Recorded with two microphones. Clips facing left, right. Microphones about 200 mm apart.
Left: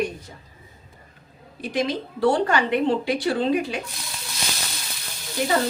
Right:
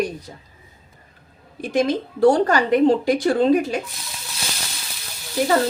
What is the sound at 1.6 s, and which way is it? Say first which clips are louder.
A woman's voice: right 5 dB; 45° right (ahead or behind).